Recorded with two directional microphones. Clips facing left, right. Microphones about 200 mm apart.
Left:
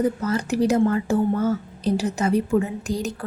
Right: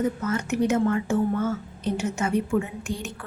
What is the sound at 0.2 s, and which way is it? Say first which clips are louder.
A woman's voice: left 3 dB; 35° left (ahead or behind).